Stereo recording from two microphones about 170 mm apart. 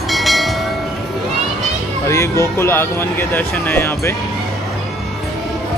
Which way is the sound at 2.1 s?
15° left (ahead or behind).